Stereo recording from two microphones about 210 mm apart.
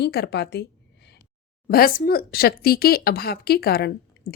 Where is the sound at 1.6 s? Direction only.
45° left (ahead or behind).